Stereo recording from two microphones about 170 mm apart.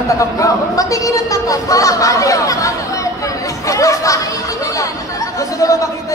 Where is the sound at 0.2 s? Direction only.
20° left (ahead or behind).